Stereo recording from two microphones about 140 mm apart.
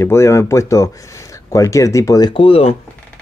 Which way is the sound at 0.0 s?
20° left (ahead or behind).